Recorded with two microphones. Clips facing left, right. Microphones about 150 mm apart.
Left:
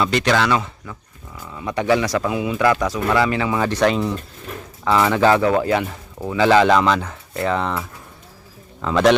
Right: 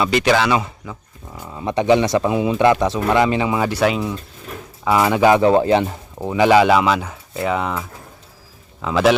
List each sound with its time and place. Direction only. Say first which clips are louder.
0.0 s speech: right 2 dB; 5° right (ahead or behind)
1.4 s speech: right 3 dB; 30° right (ahead or behind)
5.4 s speech: right 4 dB; 25° right (ahead or behind); by 9.1 s 5° right (ahead or behind)